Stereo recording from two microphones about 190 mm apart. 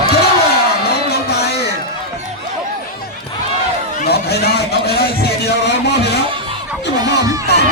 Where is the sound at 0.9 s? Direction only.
60° left (ahead or behind).